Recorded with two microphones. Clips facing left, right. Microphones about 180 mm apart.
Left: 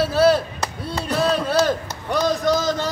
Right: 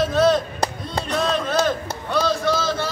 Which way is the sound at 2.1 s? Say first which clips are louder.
Left 2 dB; 15° left (ahead or behind).